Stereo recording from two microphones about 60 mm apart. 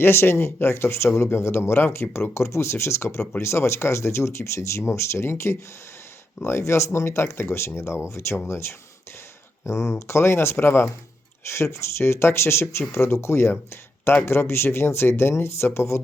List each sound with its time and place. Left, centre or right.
0.0 s speech: left